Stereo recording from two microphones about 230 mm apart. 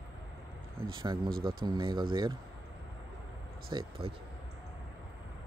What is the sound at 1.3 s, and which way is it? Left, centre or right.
Speech, right.